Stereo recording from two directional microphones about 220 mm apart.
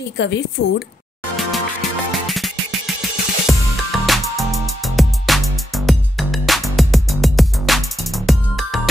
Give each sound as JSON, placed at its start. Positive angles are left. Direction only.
{"t": 0.2, "sound": "a woman's voice", "side_deg": 50}
{"t": 1.3, "sound": "music", "side_deg": 0}